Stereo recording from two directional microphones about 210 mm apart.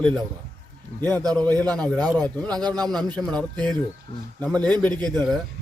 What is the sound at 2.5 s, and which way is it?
Speech, 20° right (ahead or behind).